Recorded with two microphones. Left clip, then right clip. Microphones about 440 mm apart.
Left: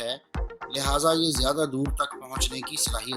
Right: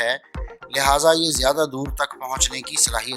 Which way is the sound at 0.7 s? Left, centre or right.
Centre.